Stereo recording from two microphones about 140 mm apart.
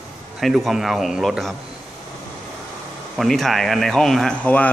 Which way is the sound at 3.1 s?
Centre (ahead or behind).